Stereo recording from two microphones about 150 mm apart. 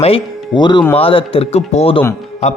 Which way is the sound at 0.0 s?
35° left (ahead or behind).